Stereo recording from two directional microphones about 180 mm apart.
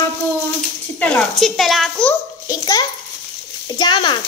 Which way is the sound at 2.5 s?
20° left (ahead or behind).